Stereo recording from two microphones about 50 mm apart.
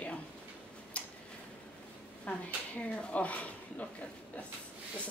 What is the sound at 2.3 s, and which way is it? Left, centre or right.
Speech, left.